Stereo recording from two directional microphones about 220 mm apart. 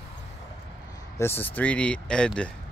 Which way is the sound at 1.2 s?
10° left (ahead or behind).